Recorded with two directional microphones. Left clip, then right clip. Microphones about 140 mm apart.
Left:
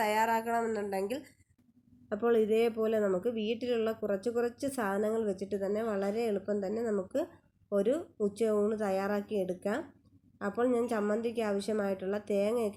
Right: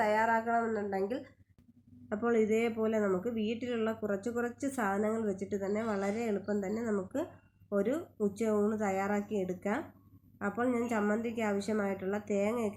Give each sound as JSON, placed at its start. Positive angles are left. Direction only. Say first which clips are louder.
{"t": 0.0, "sound": "speech", "louder": "even", "side_deg": 35}
{"t": 2.0, "sound": "speech", "louder": "left 2 dB", "side_deg": 20}